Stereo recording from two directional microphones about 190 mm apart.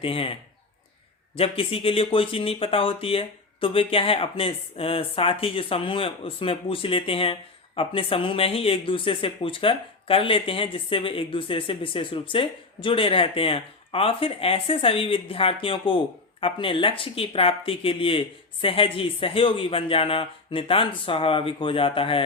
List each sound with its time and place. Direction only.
0.0 s speech: 30° left (ahead or behind)
1.4 s speech: 30° left (ahead or behind)